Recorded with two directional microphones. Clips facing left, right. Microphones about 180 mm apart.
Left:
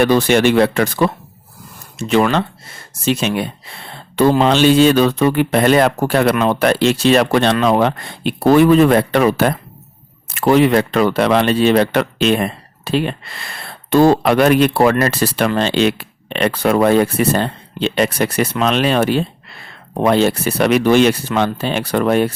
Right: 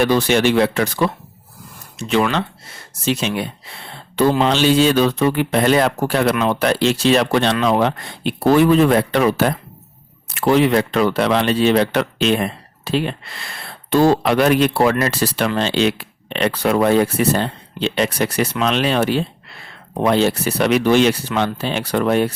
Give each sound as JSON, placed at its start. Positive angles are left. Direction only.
{"t": 0.0, "sound": "speech", "side_deg": 55}